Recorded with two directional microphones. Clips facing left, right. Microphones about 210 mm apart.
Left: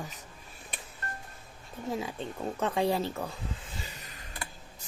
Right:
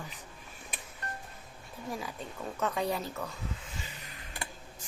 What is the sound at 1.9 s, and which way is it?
Speech, 25° left (ahead or behind).